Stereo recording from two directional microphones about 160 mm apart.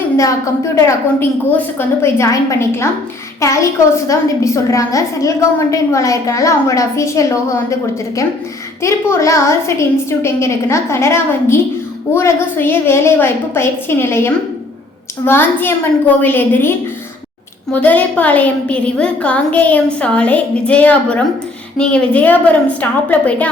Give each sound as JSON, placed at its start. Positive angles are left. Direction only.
{"t": 0.2, "sound": "a woman's voice", "side_deg": 20}
{"t": 8.8, "sound": "a woman's voice", "side_deg": 20}